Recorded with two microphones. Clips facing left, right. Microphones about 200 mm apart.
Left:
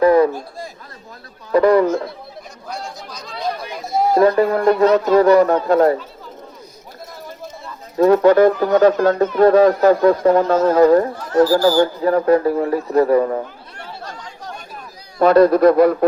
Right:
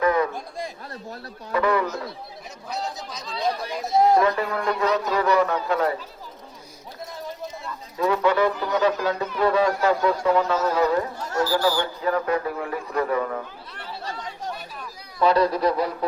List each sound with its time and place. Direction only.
0.0 s a sound: 35° left (ahead or behind)
1.5 s speech: 40° left (ahead or behind)
2.6 s speech: centre (ahead or behind)
4.2 s speech: 40° left (ahead or behind)
7.9 s a man's voice: 45° left (ahead or behind)